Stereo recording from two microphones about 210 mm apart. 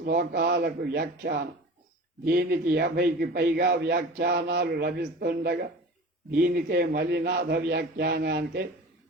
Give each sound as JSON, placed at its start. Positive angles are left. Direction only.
{"t": 0.0, "sound": "a man's voice", "side_deg": -50}